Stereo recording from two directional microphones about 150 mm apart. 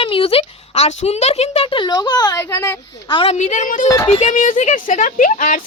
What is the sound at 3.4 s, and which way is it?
Speech, 50° left (ahead or behind).